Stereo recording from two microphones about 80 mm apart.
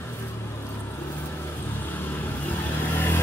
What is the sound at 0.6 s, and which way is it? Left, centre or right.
Vehicle, left.